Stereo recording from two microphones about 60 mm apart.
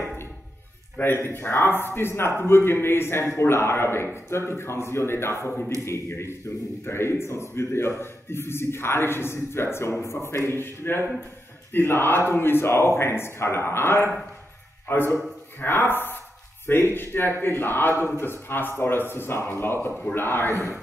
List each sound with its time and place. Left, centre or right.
0.9 s a man's voice: left